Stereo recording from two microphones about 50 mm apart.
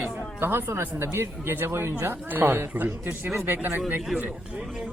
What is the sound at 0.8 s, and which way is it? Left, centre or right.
Speech, right.